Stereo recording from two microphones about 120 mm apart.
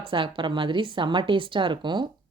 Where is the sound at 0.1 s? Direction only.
40° right (ahead or behind).